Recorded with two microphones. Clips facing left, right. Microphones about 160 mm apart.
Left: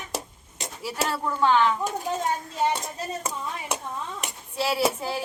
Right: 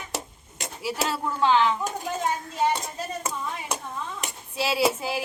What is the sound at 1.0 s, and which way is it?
Speech, 5° right (ahead or behind).